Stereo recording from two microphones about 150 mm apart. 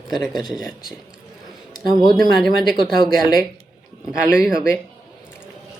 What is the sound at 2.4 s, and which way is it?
Speech, centre (ahead or behind).